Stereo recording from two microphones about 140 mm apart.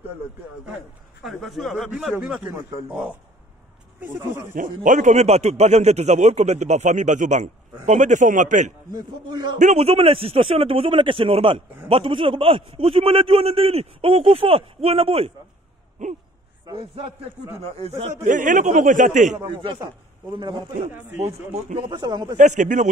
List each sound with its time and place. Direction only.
1.2 s speech: centre (ahead or behind)
4.0 s speech: 20° right (ahead or behind)
4.8 s a man's voice: 65° right (ahead or behind)
8.9 s a man's voice: 30° right (ahead or behind)
9.6 s a man's voice: 50° right (ahead or behind)
16.6 s a man's voice: 40° right (ahead or behind)
17.6 s speech: 50° right (ahead or behind)
18.2 s a man's voice: 65° right (ahead or behind)
19.4 s a man's voice: 35° right (ahead or behind)
21.2 s speech: 50° right (ahead or behind)
21.7 s a man's voice: 30° right (ahead or behind)
22.4 s a man's voice: 60° right (ahead or behind)